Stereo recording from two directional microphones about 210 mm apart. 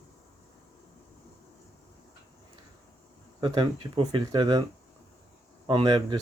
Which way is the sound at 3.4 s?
20° right (ahead or behind).